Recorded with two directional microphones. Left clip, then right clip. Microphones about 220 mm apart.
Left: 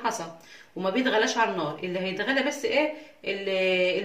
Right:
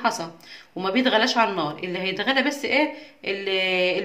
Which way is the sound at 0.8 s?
50° right (ahead or behind).